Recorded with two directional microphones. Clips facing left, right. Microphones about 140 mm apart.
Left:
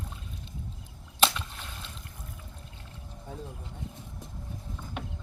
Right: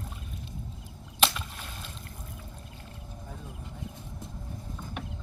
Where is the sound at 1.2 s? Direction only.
5° right (ahead or behind).